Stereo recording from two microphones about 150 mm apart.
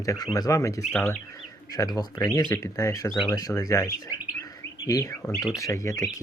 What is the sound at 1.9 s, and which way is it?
Speech, 25° left (ahead or behind).